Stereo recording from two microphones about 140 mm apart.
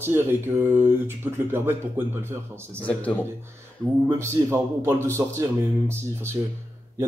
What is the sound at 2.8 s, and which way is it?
Speech, 10° left (ahead or behind).